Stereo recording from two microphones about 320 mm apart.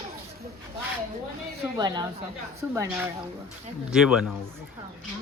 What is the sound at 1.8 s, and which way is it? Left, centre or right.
A woman's voice, centre.